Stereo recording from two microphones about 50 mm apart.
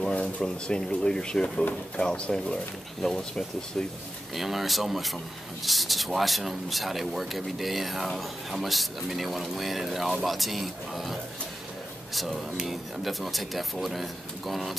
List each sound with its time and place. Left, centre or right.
0.2 s speech: centre
4.4 s speech: centre